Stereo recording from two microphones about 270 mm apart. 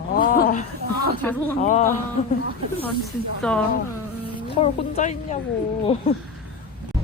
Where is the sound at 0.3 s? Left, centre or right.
Left.